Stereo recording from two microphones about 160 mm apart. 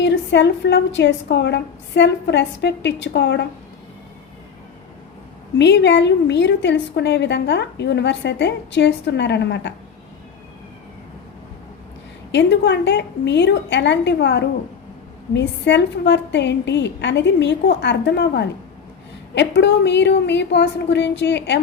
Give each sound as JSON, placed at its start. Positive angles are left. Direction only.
{"t": 0.0, "sound": "a woman's voice", "side_deg": 90}
{"t": 5.5, "sound": "a woman's voice", "side_deg": 90}
{"t": 12.3, "sound": "a woman's voice", "side_deg": 90}